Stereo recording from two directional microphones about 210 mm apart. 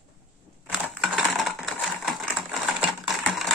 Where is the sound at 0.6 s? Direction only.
Centre (ahead or behind).